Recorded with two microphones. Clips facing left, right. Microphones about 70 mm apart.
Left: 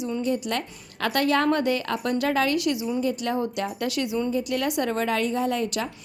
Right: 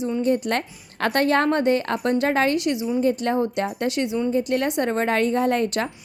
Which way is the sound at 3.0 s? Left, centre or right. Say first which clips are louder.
Right 4 dB; right.